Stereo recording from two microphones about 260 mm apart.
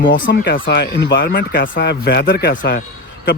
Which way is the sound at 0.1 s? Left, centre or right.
Left.